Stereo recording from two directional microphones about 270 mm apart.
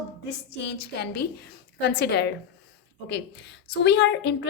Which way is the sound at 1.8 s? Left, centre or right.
Left.